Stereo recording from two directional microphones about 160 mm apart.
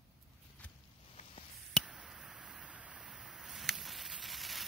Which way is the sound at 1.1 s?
40° left (ahead or behind).